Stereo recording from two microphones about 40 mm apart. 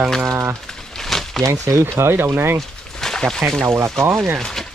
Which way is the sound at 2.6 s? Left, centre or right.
Centre.